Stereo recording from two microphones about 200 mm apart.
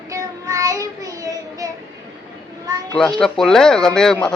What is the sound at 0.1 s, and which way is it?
Child singing, 15° right (ahead or behind).